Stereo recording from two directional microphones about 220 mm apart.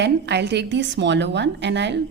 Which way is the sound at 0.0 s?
50° right (ahead or behind).